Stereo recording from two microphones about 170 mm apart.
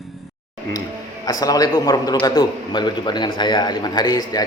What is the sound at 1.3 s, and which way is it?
A man's voice, 20° left (ahead or behind).